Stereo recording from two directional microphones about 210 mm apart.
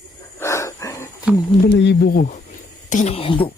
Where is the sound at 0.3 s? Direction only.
15° left (ahead or behind).